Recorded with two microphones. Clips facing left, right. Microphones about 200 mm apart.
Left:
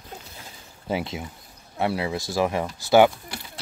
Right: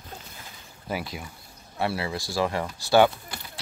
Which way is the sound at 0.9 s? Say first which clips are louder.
Left 4 dB; 25° left (ahead or behind).